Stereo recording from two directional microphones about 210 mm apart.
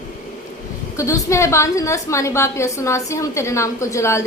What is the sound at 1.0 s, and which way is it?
A woman's voice, 15° left (ahead or behind).